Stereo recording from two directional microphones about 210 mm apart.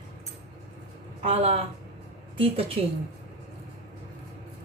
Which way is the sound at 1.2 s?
30° right (ahead or behind).